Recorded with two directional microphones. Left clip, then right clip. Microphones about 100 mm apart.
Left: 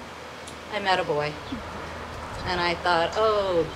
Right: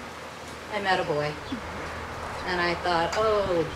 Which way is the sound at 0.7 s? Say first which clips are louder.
Even; 50° left (ahead or behind).